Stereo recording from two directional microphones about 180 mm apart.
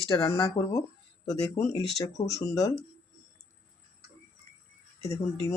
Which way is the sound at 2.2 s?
20° left (ahead or behind).